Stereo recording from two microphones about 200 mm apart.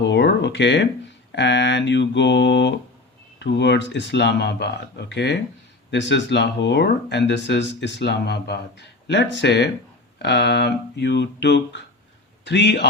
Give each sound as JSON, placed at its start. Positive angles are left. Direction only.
{"t": 0.0, "sound": "speech", "side_deg": 60}